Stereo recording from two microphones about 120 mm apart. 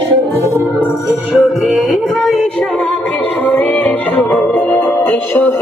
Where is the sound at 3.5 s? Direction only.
15° left (ahead or behind).